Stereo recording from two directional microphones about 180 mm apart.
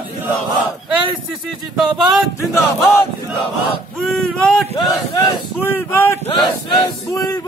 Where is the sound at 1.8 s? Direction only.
5° right (ahead or behind).